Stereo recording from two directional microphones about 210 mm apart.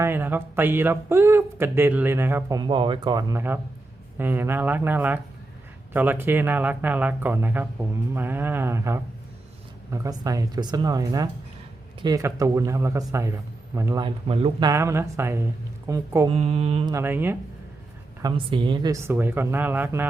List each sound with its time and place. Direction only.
0.0 s speech: 10° right (ahead or behind)
14.7 s speech: 15° right (ahead or behind)
16.3 s speech: 30° right (ahead or behind)
16.9 s speech: 10° right (ahead or behind)
18.2 s speech: 20° right (ahead or behind)